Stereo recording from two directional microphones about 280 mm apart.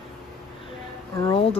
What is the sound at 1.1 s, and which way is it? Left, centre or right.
Speech, centre.